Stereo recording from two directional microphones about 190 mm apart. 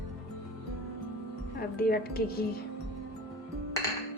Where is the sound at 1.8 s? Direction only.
55° left (ahead or behind).